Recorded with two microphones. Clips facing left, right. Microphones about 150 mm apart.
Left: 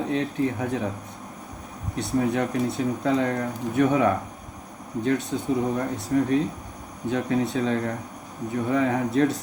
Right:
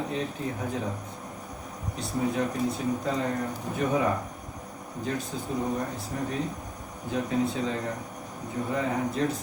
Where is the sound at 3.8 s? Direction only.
65° left (ahead or behind).